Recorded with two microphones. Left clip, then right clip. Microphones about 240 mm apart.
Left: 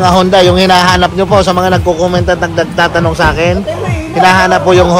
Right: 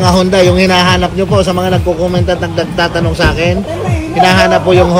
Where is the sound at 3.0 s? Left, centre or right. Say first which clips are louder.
Left 3 dB; centre.